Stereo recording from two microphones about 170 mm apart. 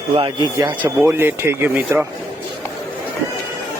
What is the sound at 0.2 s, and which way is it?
Speech, 25° right (ahead or behind).